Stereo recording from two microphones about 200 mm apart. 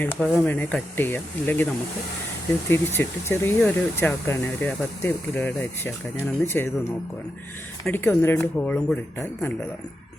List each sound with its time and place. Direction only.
0.0 s speech: 10° left (ahead or behind)
2.6 s speech: 10° left (ahead or behind)